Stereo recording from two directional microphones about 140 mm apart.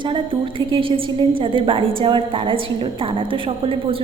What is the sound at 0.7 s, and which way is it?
A woman's voice, 40° right (ahead or behind).